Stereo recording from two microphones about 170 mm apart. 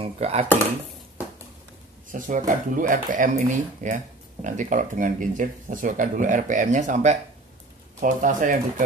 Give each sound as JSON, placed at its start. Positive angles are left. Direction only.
{"t": 0.0, "sound": "speech", "side_deg": -35}
{"t": 2.0, "sound": "speech", "side_deg": -50}